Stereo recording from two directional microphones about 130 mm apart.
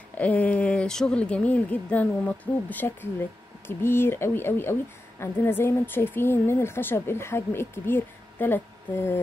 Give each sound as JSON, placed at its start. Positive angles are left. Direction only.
{"t": 0.2, "sound": "a woman's voice", "side_deg": 10}